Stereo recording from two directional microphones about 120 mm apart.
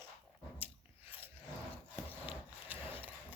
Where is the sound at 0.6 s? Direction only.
15° right (ahead or behind).